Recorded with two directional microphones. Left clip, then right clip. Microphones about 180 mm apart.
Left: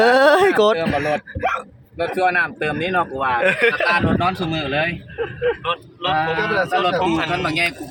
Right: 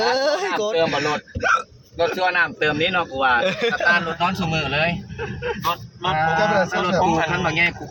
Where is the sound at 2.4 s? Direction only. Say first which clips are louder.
Right 1 dB; 45° right (ahead or behind).